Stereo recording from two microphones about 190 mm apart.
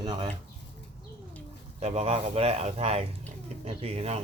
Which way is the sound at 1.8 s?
35° right (ahead or behind).